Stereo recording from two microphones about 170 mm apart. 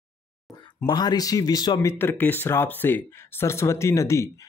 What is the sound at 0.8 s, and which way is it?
Speech, 25° left (ahead or behind).